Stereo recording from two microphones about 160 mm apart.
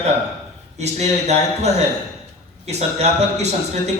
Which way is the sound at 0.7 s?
45° right (ahead or behind).